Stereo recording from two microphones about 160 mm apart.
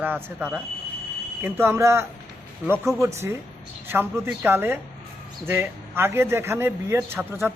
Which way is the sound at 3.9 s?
15° right (ahead or behind).